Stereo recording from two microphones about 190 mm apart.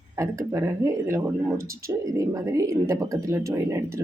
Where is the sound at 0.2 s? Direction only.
15° right (ahead or behind).